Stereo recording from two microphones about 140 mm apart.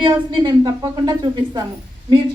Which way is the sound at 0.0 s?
35° right (ahead or behind).